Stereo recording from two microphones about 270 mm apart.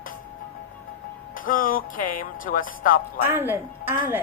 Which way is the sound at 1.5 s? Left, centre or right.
Left.